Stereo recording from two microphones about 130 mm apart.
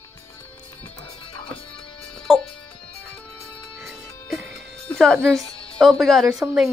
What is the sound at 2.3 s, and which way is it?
Music, centre (ahead or behind).